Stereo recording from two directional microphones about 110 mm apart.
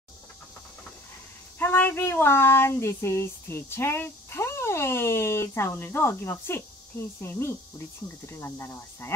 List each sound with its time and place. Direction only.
1.6 s speech: 15° left (ahead or behind)